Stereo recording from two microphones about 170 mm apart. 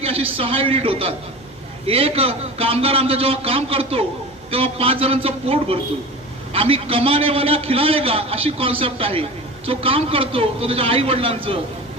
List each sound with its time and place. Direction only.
0.0 s a man's voice: 35° right (ahead or behind)